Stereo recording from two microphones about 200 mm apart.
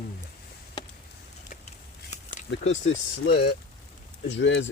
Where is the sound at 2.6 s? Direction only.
70° left (ahead or behind).